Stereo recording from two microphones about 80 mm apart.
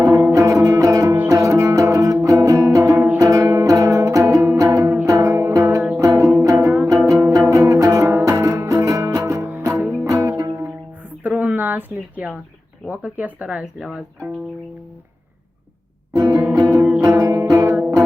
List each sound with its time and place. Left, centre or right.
0.3 s music: right
5.3 s music: right
5.5 s music: right
9.4 s music: centre
10.1 s music: right
11.2 s a sound: centre
12.9 s speech: centre
16.1 s music: right